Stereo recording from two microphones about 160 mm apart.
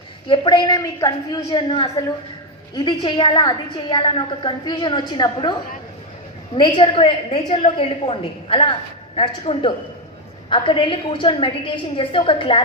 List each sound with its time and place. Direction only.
0.3 s a woman's voice: 30° left (ahead or behind)
6.6 s a woman's voice: 30° left (ahead or behind)